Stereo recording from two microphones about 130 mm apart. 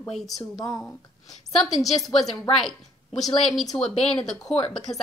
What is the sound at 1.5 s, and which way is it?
A woman's voice, centre (ahead or behind).